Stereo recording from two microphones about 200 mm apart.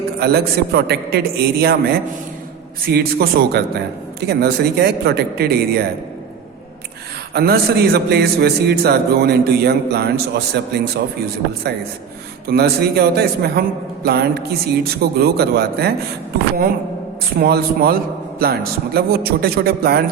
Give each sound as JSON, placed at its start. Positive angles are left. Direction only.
{"t": 0.2, "sound": "a man's voice", "side_deg": -50}
{"t": 7.3, "sound": "a man's voice", "side_deg": -50}
{"t": 12.5, "sound": "a man's voice", "side_deg": -55}
{"t": 17.3, "sound": "a man's voice", "side_deg": -50}